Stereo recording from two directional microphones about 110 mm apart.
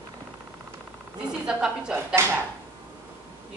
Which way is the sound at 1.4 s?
5° right (ahead or behind).